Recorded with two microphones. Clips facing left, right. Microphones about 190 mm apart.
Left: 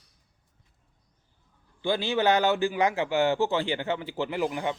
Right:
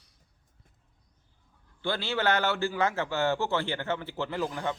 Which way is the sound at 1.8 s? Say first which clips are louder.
Left 4 dB; 15° left (ahead or behind).